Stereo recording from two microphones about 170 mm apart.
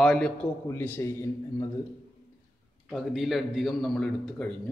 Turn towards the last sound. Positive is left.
turn(degrees=5)  # may be behind; listen again after turning